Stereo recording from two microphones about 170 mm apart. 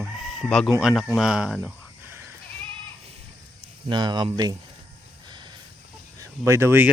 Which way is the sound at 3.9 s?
25° right (ahead or behind).